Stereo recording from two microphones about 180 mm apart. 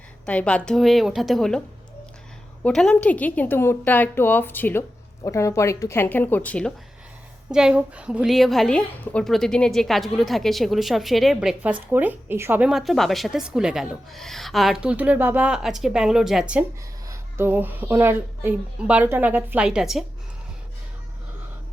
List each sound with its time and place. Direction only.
0.3 s a woman's voice: 5° left (ahead or behind)
2.6 s a woman's voice: 5° left (ahead or behind)
7.5 s a woman's voice: 5° right (ahead or behind)